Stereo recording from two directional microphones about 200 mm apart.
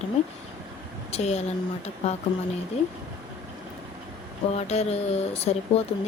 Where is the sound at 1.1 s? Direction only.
30° left (ahead or behind).